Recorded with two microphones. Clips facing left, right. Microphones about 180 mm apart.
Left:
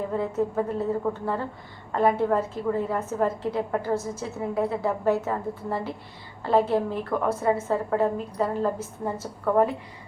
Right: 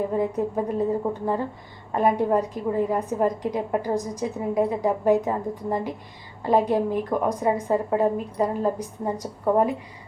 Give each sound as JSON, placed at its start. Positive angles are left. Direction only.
{"t": 0.1, "sound": "a woman's voice", "side_deg": -15}